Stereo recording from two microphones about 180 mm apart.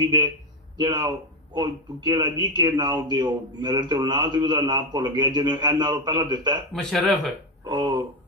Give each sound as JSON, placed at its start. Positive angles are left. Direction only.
{"t": 0.7, "sound": "speech", "side_deg": -25}
{"t": 6.7, "sound": "speech", "side_deg": 5}
{"t": 7.6, "sound": "speech", "side_deg": -25}